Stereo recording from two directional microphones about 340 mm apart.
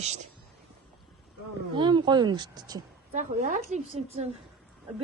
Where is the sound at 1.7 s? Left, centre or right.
Centre.